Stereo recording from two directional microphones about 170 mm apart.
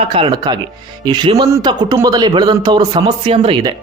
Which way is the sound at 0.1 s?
30° right (ahead or behind).